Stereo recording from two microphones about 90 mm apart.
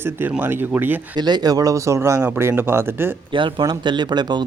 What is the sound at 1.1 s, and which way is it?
Speech, 50° right (ahead or behind).